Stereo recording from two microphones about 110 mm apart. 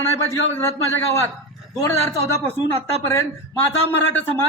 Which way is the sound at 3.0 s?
25° left (ahead or behind).